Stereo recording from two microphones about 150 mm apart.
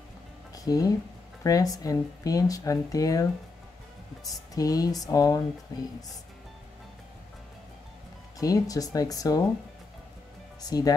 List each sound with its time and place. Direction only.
0.7 s speech: 25° left (ahead or behind)
8.4 s speech: 25° left (ahead or behind)
10.6 s speech: 25° left (ahead or behind)